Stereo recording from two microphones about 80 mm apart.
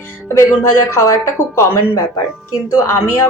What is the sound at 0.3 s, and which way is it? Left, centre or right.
A woman's voice, left.